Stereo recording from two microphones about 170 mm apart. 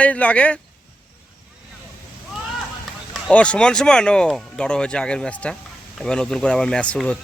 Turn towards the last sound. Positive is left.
turn(degrees=5)  # may be behind; listen again after turning